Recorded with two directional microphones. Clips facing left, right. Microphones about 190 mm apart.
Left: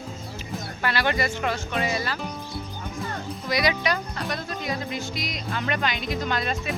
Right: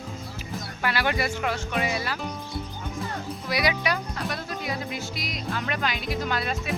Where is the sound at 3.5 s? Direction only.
10° right (ahead or behind).